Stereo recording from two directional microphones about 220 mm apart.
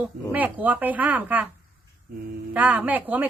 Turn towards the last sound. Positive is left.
turn(degrees=-5)  # may be behind; listen again after turning